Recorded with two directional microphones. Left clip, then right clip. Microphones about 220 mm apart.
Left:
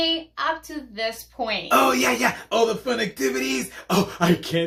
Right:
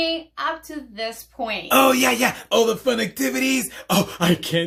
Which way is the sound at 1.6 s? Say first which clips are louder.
Right 3 dB; 40° right (ahead or behind).